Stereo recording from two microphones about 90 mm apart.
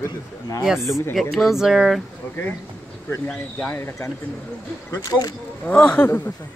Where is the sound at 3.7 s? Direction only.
25° left (ahead or behind).